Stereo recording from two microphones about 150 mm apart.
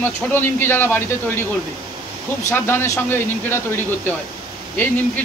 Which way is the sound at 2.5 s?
15° left (ahead or behind).